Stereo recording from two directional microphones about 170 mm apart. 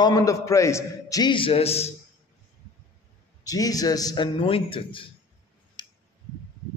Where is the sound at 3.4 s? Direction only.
20° left (ahead or behind).